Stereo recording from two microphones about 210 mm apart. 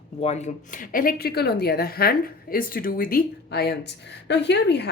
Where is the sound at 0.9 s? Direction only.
40° left (ahead or behind).